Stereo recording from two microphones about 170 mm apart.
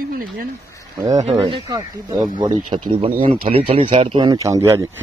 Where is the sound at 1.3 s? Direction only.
25° right (ahead or behind).